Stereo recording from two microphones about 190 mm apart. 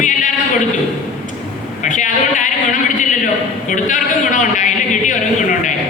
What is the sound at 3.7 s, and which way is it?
Speech, 40° left (ahead or behind).